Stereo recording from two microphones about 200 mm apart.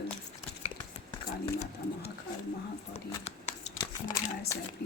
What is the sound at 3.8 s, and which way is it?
Speech, 20° left (ahead or behind).